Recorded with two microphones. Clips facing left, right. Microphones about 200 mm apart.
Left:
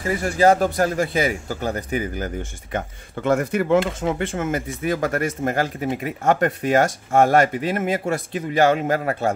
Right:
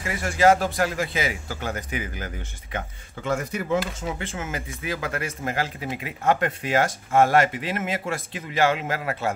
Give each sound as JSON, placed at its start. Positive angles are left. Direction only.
{"t": 0.0, "sound": "speech", "side_deg": 35}
{"t": 3.3, "sound": "speech", "side_deg": 60}